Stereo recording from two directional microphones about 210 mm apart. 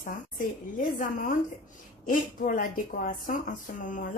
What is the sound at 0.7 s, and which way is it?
Speech, 40° left (ahead or behind).